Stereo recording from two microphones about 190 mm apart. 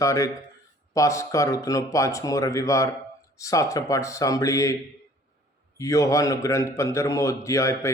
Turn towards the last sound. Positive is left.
turn(degrees=15)  # may be behind; listen again after turning